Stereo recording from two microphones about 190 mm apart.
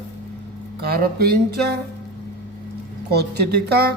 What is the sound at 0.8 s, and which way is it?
A man's voice, 55° right (ahead or behind).